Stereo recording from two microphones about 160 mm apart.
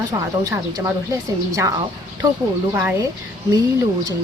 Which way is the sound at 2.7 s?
15° right (ahead or behind).